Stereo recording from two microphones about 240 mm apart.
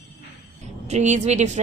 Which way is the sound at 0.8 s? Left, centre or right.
Right.